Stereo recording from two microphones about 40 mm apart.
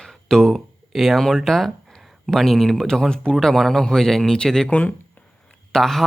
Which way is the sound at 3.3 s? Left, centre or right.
Centre.